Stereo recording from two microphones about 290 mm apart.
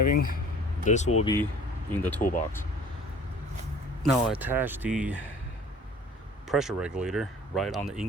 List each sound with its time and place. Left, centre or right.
0.0 s speech: left
0.9 s speech: left
1.2 s speech: centre
4.0 s speech: centre
6.5 s speech: centre